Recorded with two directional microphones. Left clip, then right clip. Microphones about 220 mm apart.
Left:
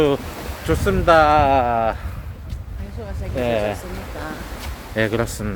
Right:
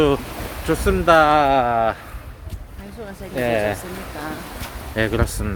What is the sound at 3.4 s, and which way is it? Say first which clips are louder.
Speech: right 1 dB; centre (ahead or behind).